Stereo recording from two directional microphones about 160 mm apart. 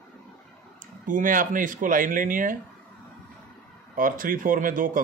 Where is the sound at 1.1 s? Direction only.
55° right (ahead or behind).